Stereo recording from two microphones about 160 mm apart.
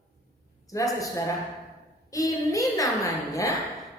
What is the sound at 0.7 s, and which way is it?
Speech, 20° left (ahead or behind).